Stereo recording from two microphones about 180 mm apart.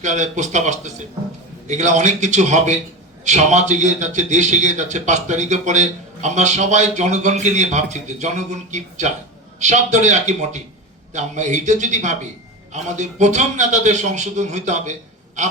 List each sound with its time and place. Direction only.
0.0 s a man's voice: 40° right (ahead or behind)